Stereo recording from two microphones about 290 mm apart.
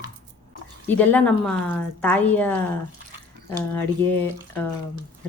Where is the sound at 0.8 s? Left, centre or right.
Centre.